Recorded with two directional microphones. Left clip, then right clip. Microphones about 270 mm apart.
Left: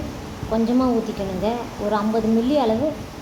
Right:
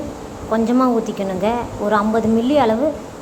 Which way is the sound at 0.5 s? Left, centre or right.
Centre.